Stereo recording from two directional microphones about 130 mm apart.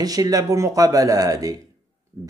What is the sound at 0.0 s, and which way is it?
Speech, 30° right (ahead or behind).